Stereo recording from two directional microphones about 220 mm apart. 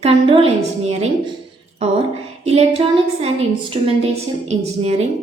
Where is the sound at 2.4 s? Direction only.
25° right (ahead or behind).